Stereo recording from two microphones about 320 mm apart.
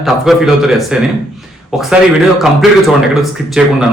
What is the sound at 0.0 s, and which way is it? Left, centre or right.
Speech, centre.